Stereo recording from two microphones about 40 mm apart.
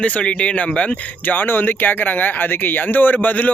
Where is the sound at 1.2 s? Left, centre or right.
Left.